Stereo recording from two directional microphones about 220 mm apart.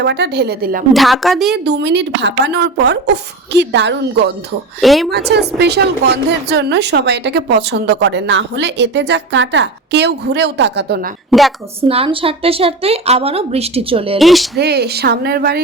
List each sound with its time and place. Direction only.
0.0 s a woman's voice: 50° right (ahead or behind)
0.9 s a woman's voice: centre (ahead or behind)
1.5 s a woman's voice: 50° right (ahead or behind)
4.8 s a woman's voice: centre (ahead or behind)
5.5 s a woman's voice: 50° right (ahead or behind)
11.3 s a woman's voice: centre (ahead or behind)
11.9 s a woman's voice: 25° right (ahead or behind)
14.2 s a woman's voice: centre (ahead or behind)
14.5 s a woman's voice: 50° right (ahead or behind)